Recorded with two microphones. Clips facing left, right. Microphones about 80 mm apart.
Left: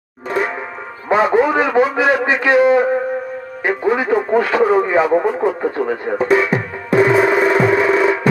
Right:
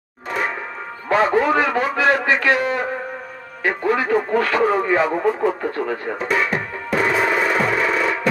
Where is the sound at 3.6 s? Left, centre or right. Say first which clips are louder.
Left 3 dB; centre.